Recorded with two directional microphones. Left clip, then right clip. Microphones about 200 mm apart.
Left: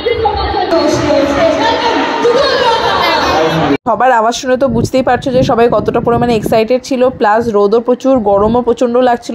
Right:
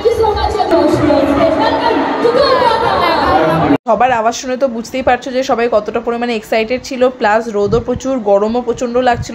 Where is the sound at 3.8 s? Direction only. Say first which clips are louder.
Left 4 dB; 25° left (ahead or behind).